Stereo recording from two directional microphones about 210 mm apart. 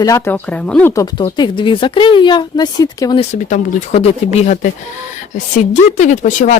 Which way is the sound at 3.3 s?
30° left (ahead or behind).